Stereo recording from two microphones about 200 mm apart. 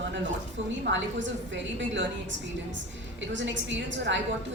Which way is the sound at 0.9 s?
65° right (ahead or behind).